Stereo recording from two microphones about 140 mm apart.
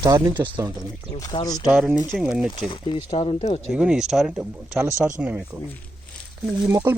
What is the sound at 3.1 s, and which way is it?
Speech, 45° left (ahead or behind).